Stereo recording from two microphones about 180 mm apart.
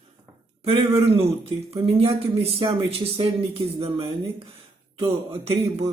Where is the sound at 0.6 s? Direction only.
30° right (ahead or behind).